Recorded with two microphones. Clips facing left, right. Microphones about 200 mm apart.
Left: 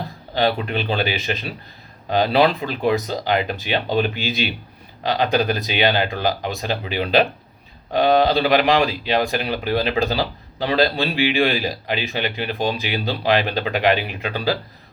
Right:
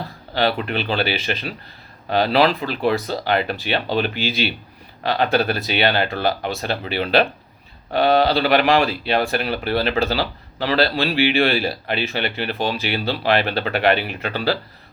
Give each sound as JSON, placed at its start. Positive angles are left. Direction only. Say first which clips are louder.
{"t": 0.3, "sound": "speech", "louder": "even", "side_deg": 15}
{"t": 2.1, "sound": "speech", "louder": "even", "side_deg": 15}